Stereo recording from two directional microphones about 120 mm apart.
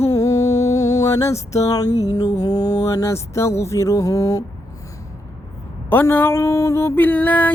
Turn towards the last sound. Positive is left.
turn(degrees=15)  # may be behind; listen again after turning